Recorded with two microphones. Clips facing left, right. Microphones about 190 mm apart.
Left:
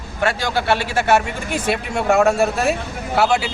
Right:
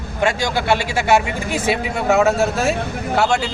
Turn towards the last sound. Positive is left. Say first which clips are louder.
# even
turn(degrees=5)  # may be behind; listen again after turning